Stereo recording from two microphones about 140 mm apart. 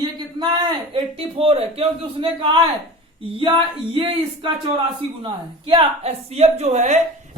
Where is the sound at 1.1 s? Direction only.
40° right (ahead or behind).